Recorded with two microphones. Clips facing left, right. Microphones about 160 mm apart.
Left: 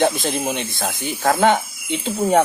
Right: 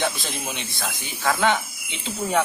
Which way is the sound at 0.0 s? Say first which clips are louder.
Left 8 dB; 50° left (ahead or behind).